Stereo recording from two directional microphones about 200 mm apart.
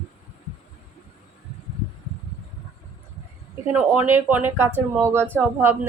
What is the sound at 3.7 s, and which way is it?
A woman's voice, 5° right (ahead or behind).